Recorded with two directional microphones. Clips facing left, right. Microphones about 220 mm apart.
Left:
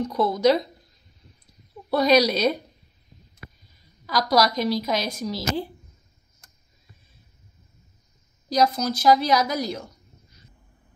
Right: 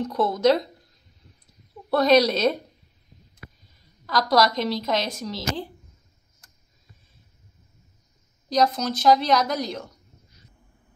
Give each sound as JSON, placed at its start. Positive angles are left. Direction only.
{"t": 0.1, "sound": "a woman's voice", "side_deg": 0}
{"t": 1.9, "sound": "a woman's voice", "side_deg": 0}
{"t": 4.0, "sound": "a woman's voice", "side_deg": 0}
{"t": 8.5, "sound": "a woman's voice", "side_deg": 5}